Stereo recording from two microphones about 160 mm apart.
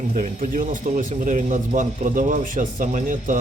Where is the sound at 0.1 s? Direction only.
65° right (ahead or behind).